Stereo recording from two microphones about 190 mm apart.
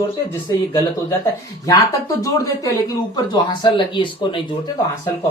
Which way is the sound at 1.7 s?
20° left (ahead or behind).